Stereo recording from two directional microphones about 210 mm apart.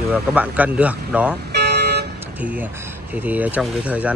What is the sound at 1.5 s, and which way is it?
Vehicle, 50° right (ahead or behind).